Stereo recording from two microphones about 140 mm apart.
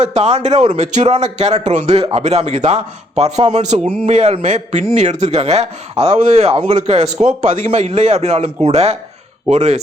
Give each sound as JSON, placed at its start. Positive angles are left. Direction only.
{"t": 0.0, "sound": "a man's voice", "side_deg": -55}